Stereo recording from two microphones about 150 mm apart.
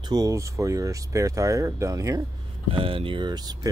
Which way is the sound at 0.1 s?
20° right (ahead or behind).